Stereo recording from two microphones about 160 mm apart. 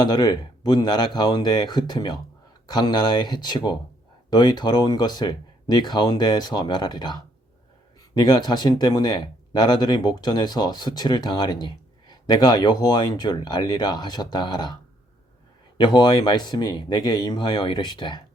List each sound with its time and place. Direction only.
0.0 s speech: 25° left (ahead or behind)
15.8 s speech: 30° left (ahead or behind)